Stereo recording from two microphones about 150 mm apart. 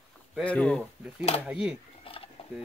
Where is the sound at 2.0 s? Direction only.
40° left (ahead or behind).